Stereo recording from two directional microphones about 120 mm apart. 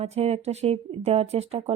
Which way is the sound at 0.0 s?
60° right (ahead or behind).